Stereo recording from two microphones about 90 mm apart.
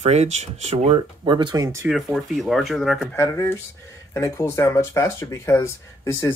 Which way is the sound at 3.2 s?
35° left (ahead or behind).